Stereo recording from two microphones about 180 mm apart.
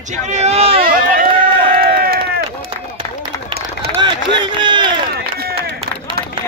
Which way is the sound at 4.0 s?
25° right (ahead or behind).